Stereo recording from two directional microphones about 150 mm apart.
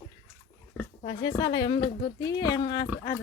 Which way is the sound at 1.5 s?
30° left (ahead or behind).